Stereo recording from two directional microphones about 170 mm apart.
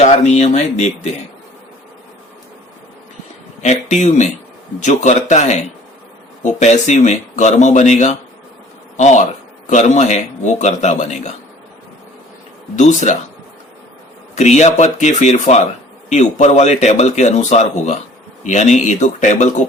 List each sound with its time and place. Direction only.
0.0 s speech: 40° left (ahead or behind)
3.6 s speech: 45° left (ahead or behind)
12.7 s speech: 45° left (ahead or behind)
14.3 s speech: 40° left (ahead or behind)